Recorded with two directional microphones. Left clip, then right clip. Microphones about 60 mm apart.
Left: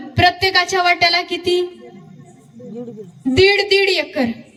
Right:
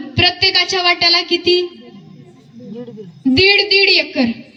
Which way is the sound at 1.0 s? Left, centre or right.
Left.